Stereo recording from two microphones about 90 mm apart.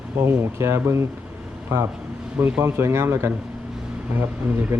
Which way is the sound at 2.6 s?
25° right (ahead or behind).